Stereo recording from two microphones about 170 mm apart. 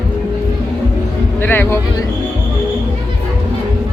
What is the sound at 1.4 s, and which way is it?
Speech, 10° left (ahead or behind).